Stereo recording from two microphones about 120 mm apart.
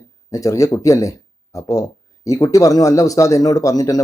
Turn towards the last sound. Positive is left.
turn(degrees=30)  # may be behind; listen again after turning